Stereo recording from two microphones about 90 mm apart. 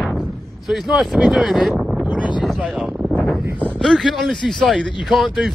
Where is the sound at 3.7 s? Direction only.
Centre (ahead or behind).